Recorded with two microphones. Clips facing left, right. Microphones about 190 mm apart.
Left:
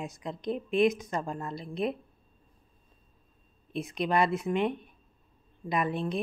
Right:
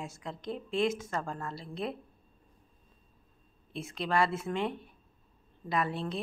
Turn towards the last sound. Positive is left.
turn(degrees=15)  # may be behind; listen again after turning